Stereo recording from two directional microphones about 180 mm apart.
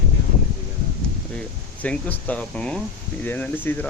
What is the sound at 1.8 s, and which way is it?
Speech, 10° left (ahead or behind).